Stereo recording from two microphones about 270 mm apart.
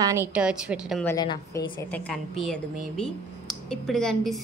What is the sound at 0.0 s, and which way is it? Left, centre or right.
A woman's voice, centre.